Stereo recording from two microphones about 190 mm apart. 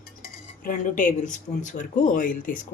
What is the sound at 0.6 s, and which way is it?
Speech, 45° left (ahead or behind).